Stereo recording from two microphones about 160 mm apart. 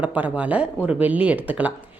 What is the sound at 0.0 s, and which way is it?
A woman's voice, 10° right (ahead or behind).